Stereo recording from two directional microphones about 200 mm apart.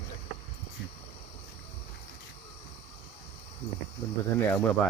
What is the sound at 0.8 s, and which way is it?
Cricket, 65° left (ahead or behind).